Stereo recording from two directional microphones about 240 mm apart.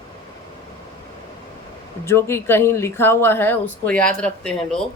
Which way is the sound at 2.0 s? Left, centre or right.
Centre.